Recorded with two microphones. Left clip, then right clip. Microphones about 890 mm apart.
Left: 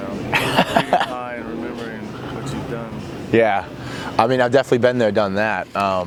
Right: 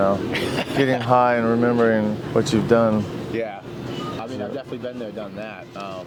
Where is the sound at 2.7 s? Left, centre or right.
Right.